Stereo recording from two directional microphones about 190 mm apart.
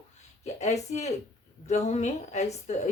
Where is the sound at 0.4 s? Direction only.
35° left (ahead or behind).